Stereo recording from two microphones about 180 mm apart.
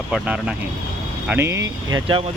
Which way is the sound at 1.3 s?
15° right (ahead or behind).